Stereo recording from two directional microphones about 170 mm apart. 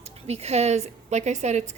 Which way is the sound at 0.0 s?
40° right (ahead or behind).